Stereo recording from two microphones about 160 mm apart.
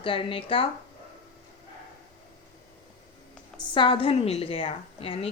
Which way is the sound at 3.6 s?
30° left (ahead or behind).